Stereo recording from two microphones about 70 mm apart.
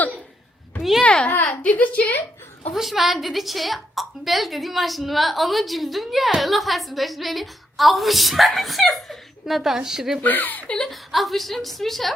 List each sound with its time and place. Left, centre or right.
0.8 s a sound: centre
1.0 s babbling: centre
1.5 s a woman's voice: left
2.7 s a woman's voice: centre
10.2 s a woman's voice: left
10.8 s a woman's voice: centre